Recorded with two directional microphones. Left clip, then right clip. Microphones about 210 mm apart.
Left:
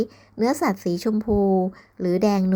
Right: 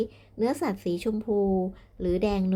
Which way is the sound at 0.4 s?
25° left (ahead or behind).